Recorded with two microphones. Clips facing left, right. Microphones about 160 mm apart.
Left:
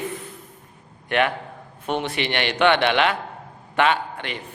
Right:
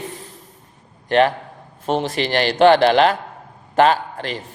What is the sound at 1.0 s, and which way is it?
A man's voice, 35° right (ahead or behind).